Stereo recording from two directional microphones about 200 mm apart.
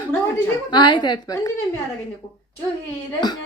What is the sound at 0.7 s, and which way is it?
Speech, 20° left (ahead or behind).